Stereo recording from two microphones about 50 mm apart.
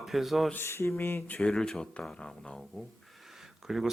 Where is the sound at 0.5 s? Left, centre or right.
Left.